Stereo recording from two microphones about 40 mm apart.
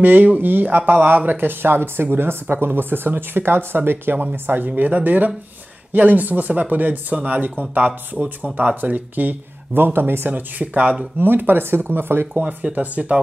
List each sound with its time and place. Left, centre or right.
0.0 s speech: right
4.6 s speech: right
10.3 s speech: right
11.1 s speech: right
12.8 s speech: right